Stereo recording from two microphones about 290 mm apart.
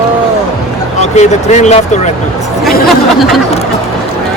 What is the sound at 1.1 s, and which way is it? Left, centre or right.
Speech, left.